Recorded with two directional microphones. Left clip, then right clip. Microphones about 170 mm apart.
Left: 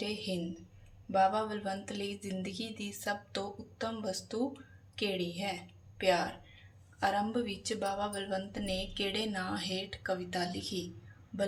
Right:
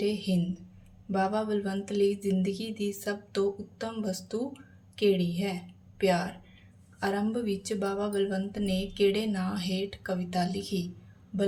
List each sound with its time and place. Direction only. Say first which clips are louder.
0.0 s a woman's voice: right 6 dB; 30° right (ahead or behind)